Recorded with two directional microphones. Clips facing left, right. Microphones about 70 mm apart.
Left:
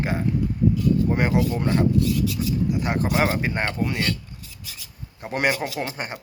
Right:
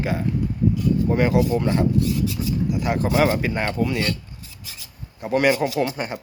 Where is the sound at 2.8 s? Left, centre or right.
Left.